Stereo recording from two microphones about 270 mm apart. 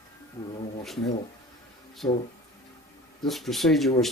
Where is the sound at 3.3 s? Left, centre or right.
Centre.